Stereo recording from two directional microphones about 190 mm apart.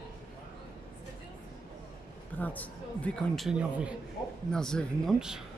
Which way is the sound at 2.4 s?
10° left (ahead or behind).